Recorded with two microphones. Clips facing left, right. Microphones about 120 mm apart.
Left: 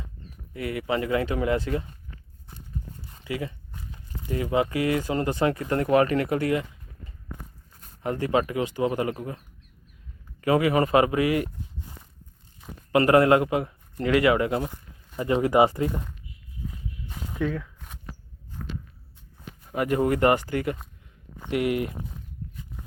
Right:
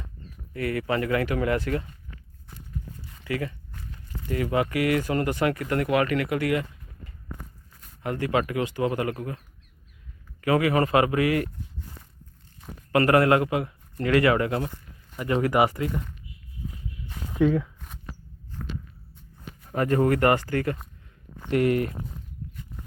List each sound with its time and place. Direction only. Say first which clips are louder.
0.5 s speech: right 1 dB; 15° left (ahead or behind)
3.2 s speech: right 2 dB; 20° left (ahead or behind)
7.8 s speech: left 1 dB; 30° left (ahead or behind)
10.4 s speech: left 1 dB; 25° left (ahead or behind)
12.9 s speech: left 1 dB; 20° left (ahead or behind)
17.3 s speech: right 7 dB; 15° right (ahead or behind)
17.7 s a sound: right 1 dB; centre (ahead or behind)
19.7 s speech: right 1 dB; 10° left (ahead or behind)